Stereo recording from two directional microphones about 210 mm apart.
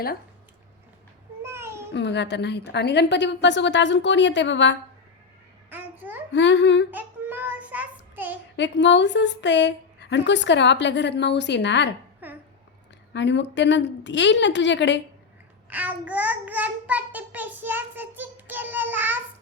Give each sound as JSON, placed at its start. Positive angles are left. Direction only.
{"t": 1.4, "sound": "babbling", "side_deg": -10}
{"t": 1.9, "sound": "a woman's voice", "side_deg": 55}
{"t": 5.7, "sound": "babbling", "side_deg": -10}
{"t": 6.3, "sound": "a woman's voice", "side_deg": 60}
{"t": 6.9, "sound": "child singing", "side_deg": -10}
{"t": 8.5, "sound": "a woman's voice", "side_deg": 55}
{"t": 12.2, "sound": "a sound", "side_deg": -10}
{"t": 13.1, "sound": "a woman's voice", "side_deg": 55}
{"t": 15.7, "sound": "child singing", "side_deg": -5}